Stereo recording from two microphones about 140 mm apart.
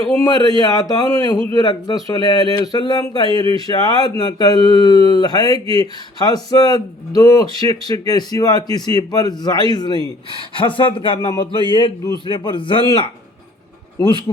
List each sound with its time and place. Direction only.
0.2 s a man's voice: 30° left (ahead or behind)